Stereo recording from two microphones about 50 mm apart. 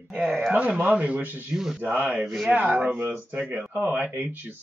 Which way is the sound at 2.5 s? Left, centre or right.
Right.